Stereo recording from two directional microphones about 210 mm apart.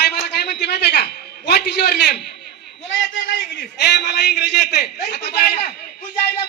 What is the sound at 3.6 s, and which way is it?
A man's voice, 55° left (ahead or behind).